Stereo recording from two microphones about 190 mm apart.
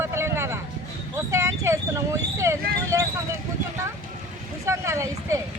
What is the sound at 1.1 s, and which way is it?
Vehicle, 15° right (ahead or behind).